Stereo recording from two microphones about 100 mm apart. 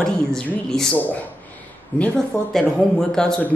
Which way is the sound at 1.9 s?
15° left (ahead or behind).